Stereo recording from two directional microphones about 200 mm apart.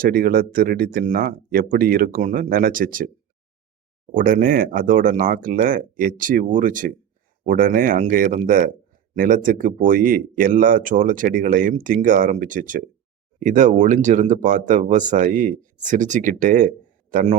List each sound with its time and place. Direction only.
0.0 s speech: 45° right (ahead or behind)
4.1 s speech: 45° right (ahead or behind)